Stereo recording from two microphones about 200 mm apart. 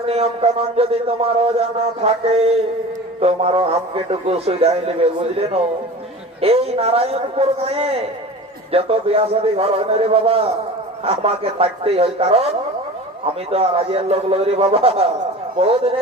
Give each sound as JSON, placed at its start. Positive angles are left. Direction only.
{"t": 0.0, "sound": "a man's voice", "side_deg": -30}
{"t": 6.4, "sound": "speech", "side_deg": -30}
{"t": 13.5, "sound": "speech", "side_deg": -30}